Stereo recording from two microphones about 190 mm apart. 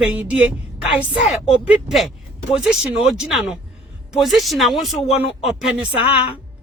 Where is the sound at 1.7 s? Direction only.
Centre (ahead or behind).